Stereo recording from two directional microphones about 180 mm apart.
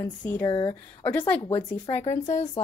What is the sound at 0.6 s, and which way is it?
Speech, 10° left (ahead or behind).